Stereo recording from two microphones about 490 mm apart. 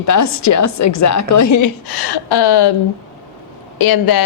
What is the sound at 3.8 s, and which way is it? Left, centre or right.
Speech, left.